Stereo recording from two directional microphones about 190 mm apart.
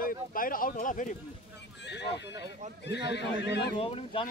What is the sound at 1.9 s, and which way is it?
Speech, 65° left (ahead or behind).